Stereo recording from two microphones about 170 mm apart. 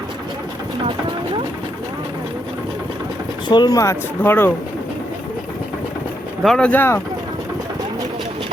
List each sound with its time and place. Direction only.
3.5 s speech: 25° left (ahead or behind)
6.4 s speech: 5° left (ahead or behind)